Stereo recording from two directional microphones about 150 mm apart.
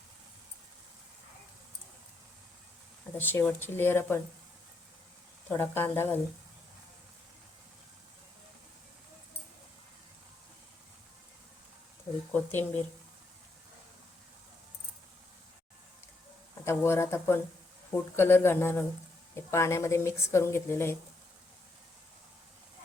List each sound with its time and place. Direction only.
3.2 s speech: 15° left (ahead or behind)
5.5 s speech: 15° left (ahead or behind)
12.3 s speech: 10° left (ahead or behind)
16.6 s speech: 15° left (ahead or behind)